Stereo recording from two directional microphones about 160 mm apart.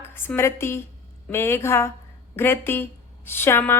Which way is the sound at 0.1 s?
15° left (ahead or behind).